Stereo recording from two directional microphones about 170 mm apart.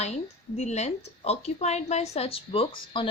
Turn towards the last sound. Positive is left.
turn(degrees=30)  # may be behind; listen again after turning